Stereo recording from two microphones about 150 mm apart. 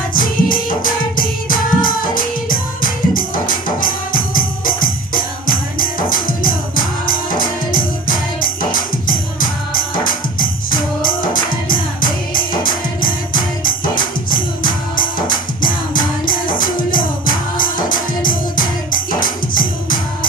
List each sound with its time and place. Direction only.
0.1 s music: 65° left (ahead or behind)